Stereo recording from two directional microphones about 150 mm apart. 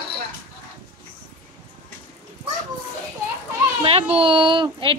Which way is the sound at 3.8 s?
40° right (ahead or behind).